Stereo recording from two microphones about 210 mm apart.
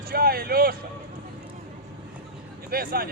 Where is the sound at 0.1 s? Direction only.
45° right (ahead or behind).